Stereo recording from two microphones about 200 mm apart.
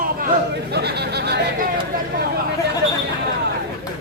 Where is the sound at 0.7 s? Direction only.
55° right (ahead or behind).